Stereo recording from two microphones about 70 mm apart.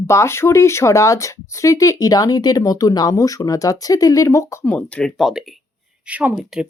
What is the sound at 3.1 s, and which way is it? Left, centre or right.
Speech, left.